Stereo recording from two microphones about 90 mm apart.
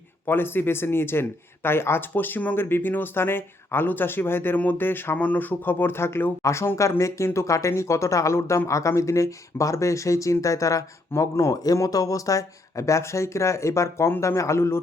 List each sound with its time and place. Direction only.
0.3 s speech: 25° left (ahead or behind)